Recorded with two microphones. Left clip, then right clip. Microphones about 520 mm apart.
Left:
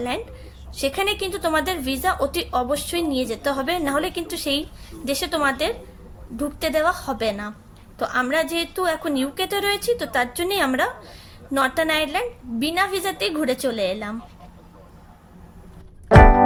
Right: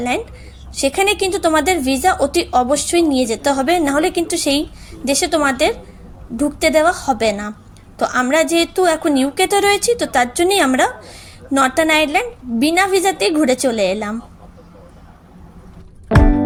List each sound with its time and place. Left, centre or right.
0.8 s a woman's voice: left